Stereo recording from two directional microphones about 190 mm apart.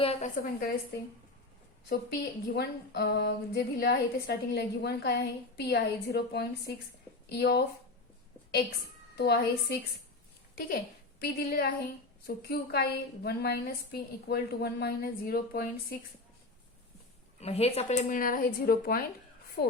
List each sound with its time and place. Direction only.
0.0 s a woman's voice: 30° left (ahead or behind)
1.9 s a woman's voice: 60° left (ahead or behind)
9.1 s a woman's voice: 55° left (ahead or behind)
11.2 s a woman's voice: 55° left (ahead or behind)
17.4 s a woman's voice: 35° left (ahead or behind); by 19.7 s 60° left (ahead or behind)